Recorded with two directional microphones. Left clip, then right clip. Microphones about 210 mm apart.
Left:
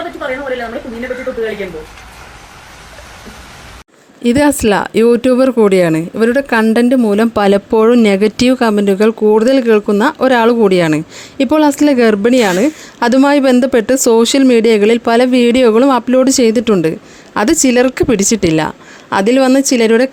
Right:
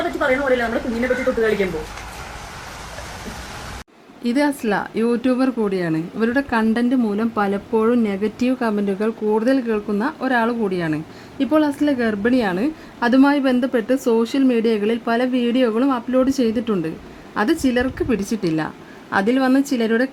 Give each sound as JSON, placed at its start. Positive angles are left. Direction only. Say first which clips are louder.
{"t": 0.0, "sound": "a woman's voice", "louder": "right 1 dB", "side_deg": 0}
{"t": 4.2, "sound": "a woman's voice", "louder": "left 9 dB", "side_deg": 30}